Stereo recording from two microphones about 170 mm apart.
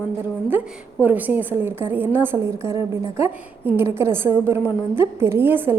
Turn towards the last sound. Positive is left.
turn(degrees=-10)  # may be behind; listen again after turning